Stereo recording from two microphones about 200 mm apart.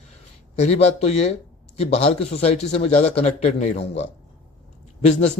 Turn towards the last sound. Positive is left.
turn(degrees=35)  # may be behind; listen again after turning